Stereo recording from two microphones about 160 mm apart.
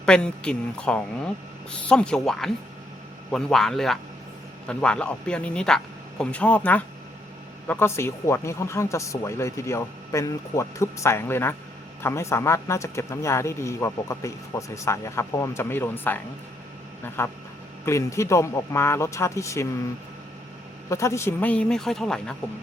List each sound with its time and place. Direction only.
0.0 s speech: 5° left (ahead or behind)
20.9 s speech: 20° left (ahead or behind)